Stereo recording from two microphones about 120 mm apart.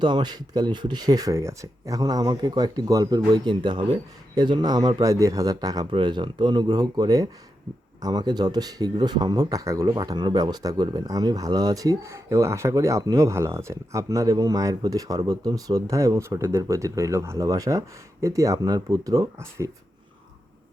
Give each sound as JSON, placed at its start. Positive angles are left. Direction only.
{"t": 0.0, "sound": "speech", "side_deg": -40}